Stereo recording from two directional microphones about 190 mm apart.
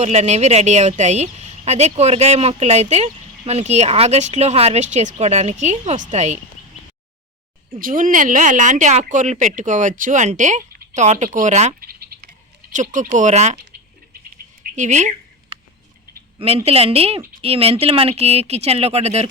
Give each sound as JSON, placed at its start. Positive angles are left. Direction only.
{"t": 0.0, "sound": "a woman's voice", "side_deg": -35}
{"t": 7.8, "sound": "a woman's voice", "side_deg": -45}
{"t": 11.9, "sound": "frog", "side_deg": -50}
{"t": 12.7, "sound": "a woman's voice", "side_deg": -40}
{"t": 14.8, "sound": "a woman's voice", "side_deg": -40}
{"t": 16.6, "sound": "a woman's voice", "side_deg": -30}